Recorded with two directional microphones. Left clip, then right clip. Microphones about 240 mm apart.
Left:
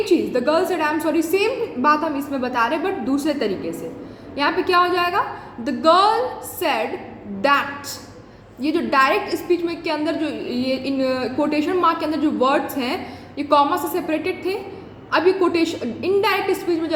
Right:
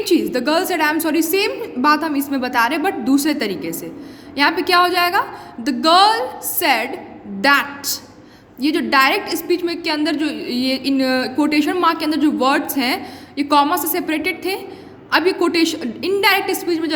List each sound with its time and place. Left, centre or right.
0.0 s a woman's voice: right